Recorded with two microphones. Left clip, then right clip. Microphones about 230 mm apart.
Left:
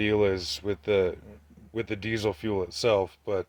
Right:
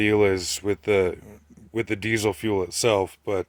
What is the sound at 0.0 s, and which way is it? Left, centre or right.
Speech, right.